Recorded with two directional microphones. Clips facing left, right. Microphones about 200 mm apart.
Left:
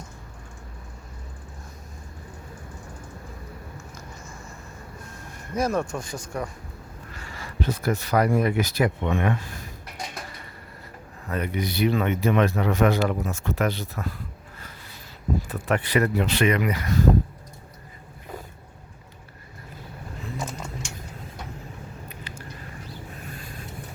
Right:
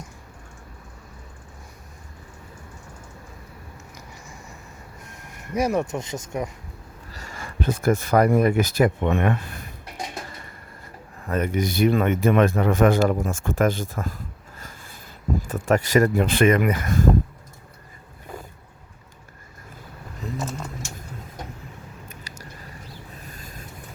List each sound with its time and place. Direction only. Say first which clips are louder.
3.9 s a sound: left 1 dB; 15° right (ahead or behind)
7.1 s speech: right 3 dB; 40° right (ahead or behind); by 9.6 s 60° right (ahead or behind)
11.3 s speech: right 4 dB; 45° right (ahead or behind)
15.4 s speech: right 4 dB; 45° right (ahead or behind)
20.3 s a sound: right 3 dB; 5° right (ahead or behind)
23.3 s boat: left 2 dB; 40° right (ahead or behind)